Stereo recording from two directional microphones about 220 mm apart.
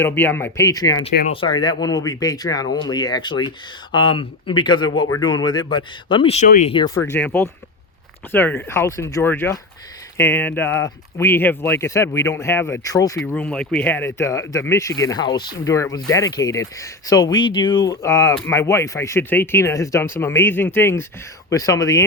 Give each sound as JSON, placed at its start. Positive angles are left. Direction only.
{"t": 0.0, "sound": "speech", "side_deg": 10}